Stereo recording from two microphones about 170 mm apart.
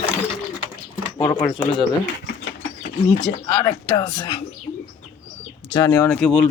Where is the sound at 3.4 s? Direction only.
20° left (ahead or behind).